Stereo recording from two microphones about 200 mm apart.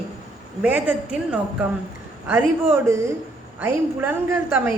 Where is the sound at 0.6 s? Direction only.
10° right (ahead or behind).